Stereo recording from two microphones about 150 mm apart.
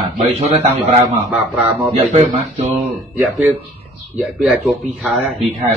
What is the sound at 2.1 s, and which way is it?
Speech, 50° right (ahead or behind).